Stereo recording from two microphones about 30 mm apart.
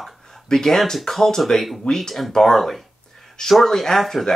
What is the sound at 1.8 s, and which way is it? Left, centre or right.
Speech, left.